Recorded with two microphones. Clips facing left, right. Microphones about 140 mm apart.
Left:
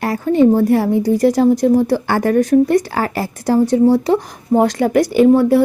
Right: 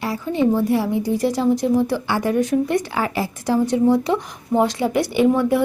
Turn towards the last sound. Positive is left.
turn(degrees=35)  # may be behind; listen again after turning